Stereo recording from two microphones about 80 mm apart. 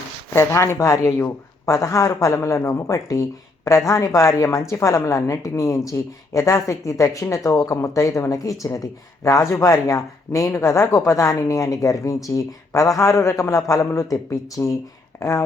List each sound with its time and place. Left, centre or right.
0.3 s speech: left